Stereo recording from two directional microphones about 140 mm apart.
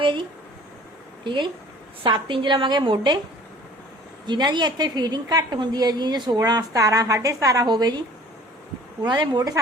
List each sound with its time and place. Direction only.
0.0 s a woman's voice: 35° right (ahead or behind)
4.3 s a woman's voice: 30° right (ahead or behind)